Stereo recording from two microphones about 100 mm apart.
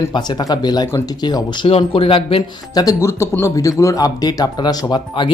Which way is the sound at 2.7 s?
35° left (ahead or behind).